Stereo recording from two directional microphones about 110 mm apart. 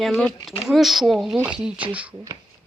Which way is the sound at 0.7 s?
Centre (ahead or behind).